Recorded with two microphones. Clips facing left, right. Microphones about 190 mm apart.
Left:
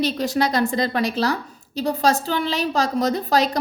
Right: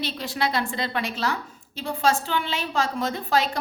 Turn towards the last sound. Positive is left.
turn(degrees=40)  # may be behind; listen again after turning